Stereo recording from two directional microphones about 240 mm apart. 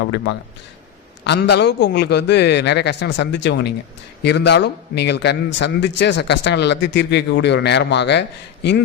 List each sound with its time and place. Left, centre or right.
0.0 s a man's voice: left